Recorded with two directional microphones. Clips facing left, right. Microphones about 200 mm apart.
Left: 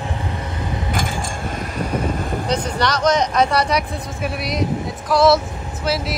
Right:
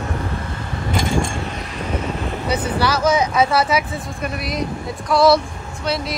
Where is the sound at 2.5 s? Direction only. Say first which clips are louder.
Right 2 dB; 5° right (ahead or behind).